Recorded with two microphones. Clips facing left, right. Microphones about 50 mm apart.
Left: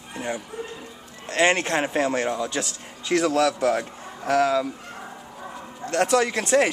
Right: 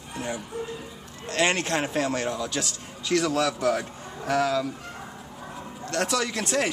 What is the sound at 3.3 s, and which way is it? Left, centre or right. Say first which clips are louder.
A man's voice: left 3 dB; left.